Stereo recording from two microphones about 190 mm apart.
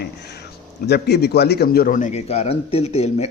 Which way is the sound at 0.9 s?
60° left (ahead or behind).